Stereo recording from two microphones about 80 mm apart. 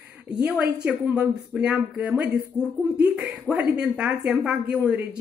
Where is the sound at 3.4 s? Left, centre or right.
Centre.